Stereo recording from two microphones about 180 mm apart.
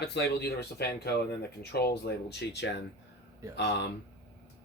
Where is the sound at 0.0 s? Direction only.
65° left (ahead or behind).